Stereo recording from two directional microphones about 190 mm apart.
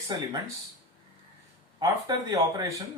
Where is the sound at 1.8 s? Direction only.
20° right (ahead or behind).